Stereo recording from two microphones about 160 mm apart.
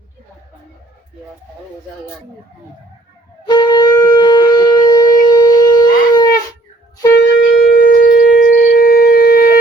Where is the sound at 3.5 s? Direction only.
25° left (ahead or behind).